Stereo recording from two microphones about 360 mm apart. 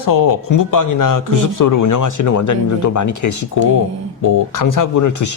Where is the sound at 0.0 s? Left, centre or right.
Left.